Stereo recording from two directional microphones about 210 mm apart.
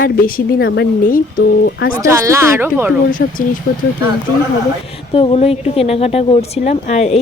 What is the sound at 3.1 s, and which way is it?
Speech, 40° left (ahead or behind).